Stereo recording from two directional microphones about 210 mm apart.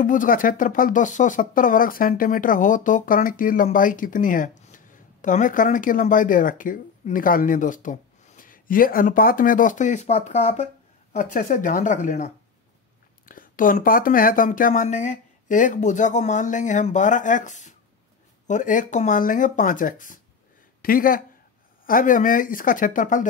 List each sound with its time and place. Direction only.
0.0 s speech: 40° left (ahead or behind)